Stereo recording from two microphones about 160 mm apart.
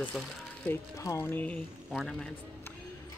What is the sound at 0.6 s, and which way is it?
Speech, 20° left (ahead or behind).